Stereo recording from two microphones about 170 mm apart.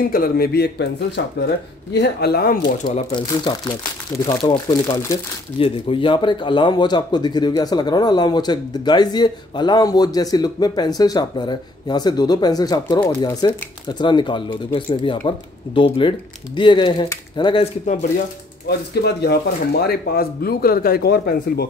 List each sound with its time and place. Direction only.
0.0 s speech: 55° left (ahead or behind)
3.1 s speech: 25° left (ahead or behind)
5.6 s speech: 30° left (ahead or behind)
18.9 s speech: 75° left (ahead or behind)
19.9 s a man's voice: 65° left (ahead or behind)